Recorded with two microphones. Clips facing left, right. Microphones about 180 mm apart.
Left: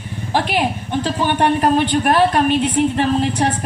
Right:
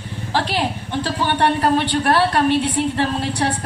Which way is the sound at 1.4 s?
15° left (ahead or behind).